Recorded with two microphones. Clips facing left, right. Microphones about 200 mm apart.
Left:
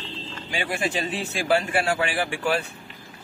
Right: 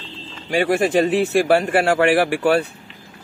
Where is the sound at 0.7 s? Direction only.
45° right (ahead or behind); by 2.5 s 70° right (ahead or behind).